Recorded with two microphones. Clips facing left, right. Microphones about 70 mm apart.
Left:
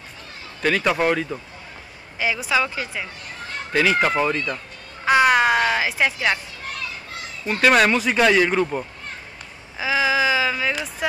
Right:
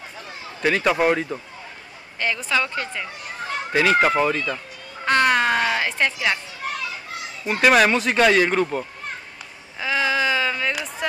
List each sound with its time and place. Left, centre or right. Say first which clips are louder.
0.6 s speech: right 1 dB; centre
2.1 s speech: left 1 dB; centre
3.7 s speech: right 1 dB; centre
4.0 s a man's voice: right 1 dB; centre
5.0 s speech: left 2 dB; centre
7.4 s speech: even; centre
7.7 s a man's voice: even; centre
9.8 s a sound: left 2 dB; centre